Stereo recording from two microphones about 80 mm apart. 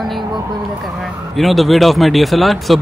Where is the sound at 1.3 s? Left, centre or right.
Centre.